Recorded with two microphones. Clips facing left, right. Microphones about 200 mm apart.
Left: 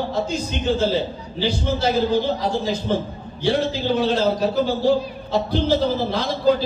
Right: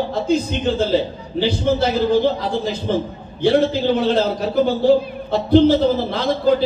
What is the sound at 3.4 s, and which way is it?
A man's voice, 55° right (ahead or behind).